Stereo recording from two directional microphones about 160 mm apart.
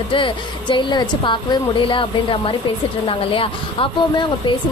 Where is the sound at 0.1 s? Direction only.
30° left (ahead or behind).